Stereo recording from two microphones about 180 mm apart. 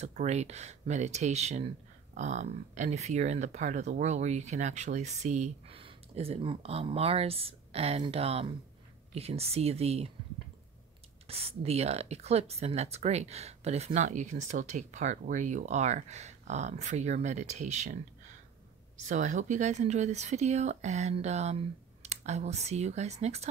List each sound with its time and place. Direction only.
0.0 s speech: 40° right (ahead or behind)
11.2 s speech: 35° right (ahead or behind)